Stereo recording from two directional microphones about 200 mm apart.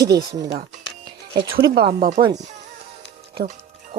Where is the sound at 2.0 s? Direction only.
45° right (ahead or behind).